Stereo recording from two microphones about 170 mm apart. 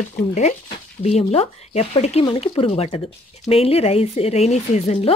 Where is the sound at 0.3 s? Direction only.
40° left (ahead or behind).